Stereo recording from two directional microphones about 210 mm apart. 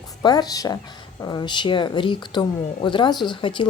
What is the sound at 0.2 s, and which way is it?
A woman's voice, 20° left (ahead or behind).